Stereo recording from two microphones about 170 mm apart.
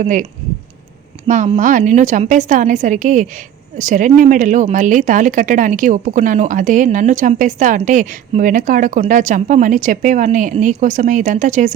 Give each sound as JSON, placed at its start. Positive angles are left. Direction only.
{"t": 0.0, "sound": "a woman's voice", "side_deg": -50}
{"t": 1.5, "sound": "a woman's voice", "side_deg": -50}